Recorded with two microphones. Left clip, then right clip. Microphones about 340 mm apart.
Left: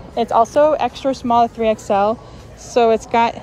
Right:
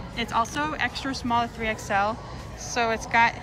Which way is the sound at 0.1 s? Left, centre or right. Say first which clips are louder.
Left 11 dB; centre.